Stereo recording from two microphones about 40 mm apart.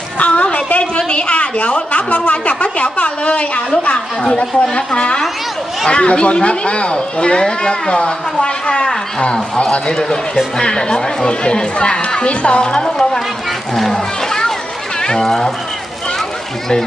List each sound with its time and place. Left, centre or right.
0.2 s a sound: left
0.4 s a woman's voice: left
4.7 s speech: left
10.6 s speech: centre
13.7 s a sound: centre
15.2 s speech: centre